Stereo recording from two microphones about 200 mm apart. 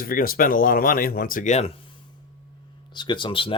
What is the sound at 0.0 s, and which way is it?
Speech, 45° left (ahead or behind).